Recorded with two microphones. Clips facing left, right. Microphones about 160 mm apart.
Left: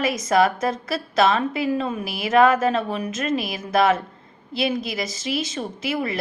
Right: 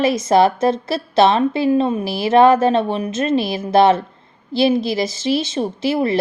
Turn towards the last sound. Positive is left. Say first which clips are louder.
# right 7 dB
turn(degrees=-30)  # may be behind; listen again after turning